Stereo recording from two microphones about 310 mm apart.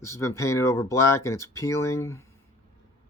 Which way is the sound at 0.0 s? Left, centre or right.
Centre.